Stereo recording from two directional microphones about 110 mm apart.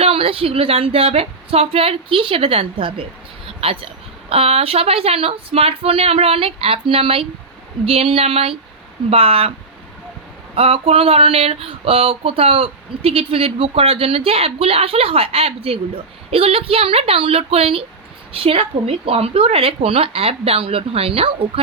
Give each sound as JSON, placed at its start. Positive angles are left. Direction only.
{"t": 0.0, "sound": "speech", "side_deg": -60}
{"t": 10.5, "sound": "speech", "side_deg": -60}